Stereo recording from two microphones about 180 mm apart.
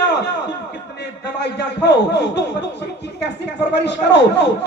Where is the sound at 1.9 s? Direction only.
75° left (ahead or behind).